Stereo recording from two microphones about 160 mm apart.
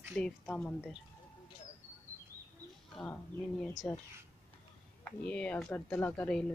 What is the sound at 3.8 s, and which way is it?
Speech, 5° left (ahead or behind).